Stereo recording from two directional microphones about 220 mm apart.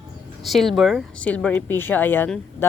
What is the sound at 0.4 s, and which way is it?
Speech, centre (ahead or behind).